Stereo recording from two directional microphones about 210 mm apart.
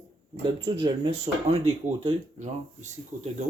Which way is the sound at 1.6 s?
30° right (ahead or behind).